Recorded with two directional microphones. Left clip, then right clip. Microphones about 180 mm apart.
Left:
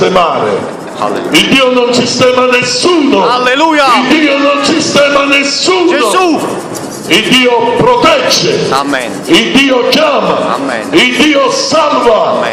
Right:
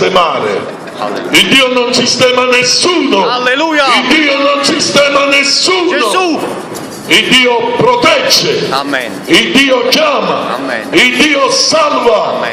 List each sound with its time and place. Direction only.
0.0 s a man's voice: 35° right (ahead or behind)
1.3 s music: 35° right (ahead or behind)
3.2 s a man's voice: centre (ahead or behind)
4.1 s music: 35° right (ahead or behind)
5.9 s a man's voice: centre (ahead or behind)
7.1 s music: 35° right (ahead or behind)